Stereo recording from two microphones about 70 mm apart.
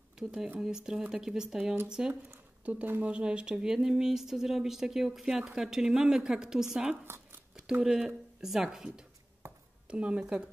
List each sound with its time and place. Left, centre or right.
0.2 s speech: centre